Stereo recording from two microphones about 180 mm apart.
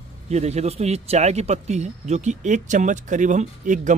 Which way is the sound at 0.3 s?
35° right (ahead or behind).